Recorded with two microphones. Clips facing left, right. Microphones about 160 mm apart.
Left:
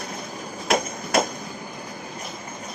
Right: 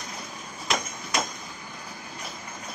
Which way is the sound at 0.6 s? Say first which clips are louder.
Left 7 dB; 55° left (ahead or behind).